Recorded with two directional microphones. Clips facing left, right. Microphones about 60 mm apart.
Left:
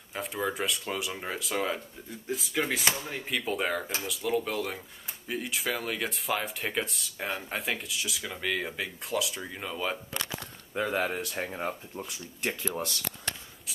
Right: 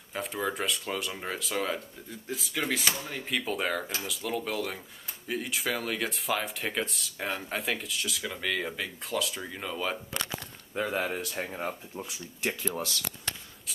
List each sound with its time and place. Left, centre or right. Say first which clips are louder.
0.1 s speech: even; centre
2.5 s speech: left 1 dB; centre